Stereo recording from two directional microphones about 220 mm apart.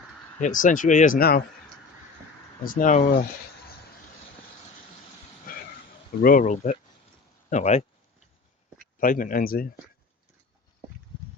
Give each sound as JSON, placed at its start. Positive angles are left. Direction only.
{"t": 0.3, "sound": "speech", "side_deg": 35}
{"t": 2.6, "sound": "speech", "side_deg": 35}
{"t": 5.5, "sound": "a sound", "side_deg": 40}
{"t": 6.2, "sound": "speech", "side_deg": 35}
{"t": 9.0, "sound": "speech", "side_deg": 40}